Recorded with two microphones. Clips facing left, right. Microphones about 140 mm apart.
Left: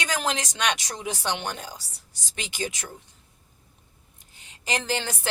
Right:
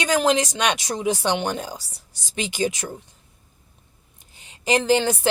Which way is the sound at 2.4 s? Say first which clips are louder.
Right 8 dB; 20° right (ahead or behind).